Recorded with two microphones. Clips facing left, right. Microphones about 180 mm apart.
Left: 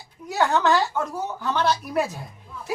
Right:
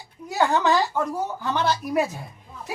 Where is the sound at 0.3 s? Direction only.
15° right (ahead or behind).